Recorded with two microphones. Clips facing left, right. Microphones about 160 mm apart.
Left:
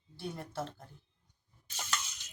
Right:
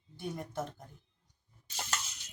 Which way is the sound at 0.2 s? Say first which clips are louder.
Right 1 dB; 15° right (ahead or behind).